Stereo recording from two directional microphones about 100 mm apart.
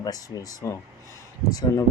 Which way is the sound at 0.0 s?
40° left (ahead or behind).